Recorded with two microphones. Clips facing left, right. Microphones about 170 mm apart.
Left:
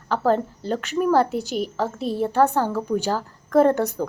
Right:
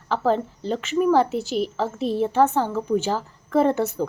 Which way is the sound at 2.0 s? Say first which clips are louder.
Right 3 dB; 40° left (ahead or behind).